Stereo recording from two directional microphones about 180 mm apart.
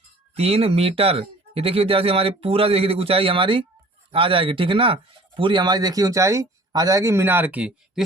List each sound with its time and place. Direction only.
0.3 s speech: 35° right (ahead or behind); by 8.0 s 5° right (ahead or behind)